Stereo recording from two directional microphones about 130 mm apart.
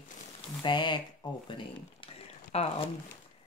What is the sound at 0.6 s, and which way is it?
Speech, 40° left (ahead or behind).